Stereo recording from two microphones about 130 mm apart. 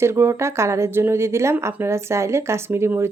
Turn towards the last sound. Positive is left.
turn(degrees=-20)  # may be behind; listen again after turning